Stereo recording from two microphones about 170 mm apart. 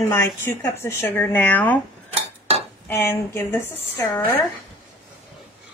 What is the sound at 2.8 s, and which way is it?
A woman's voice, 15° left (ahead or behind).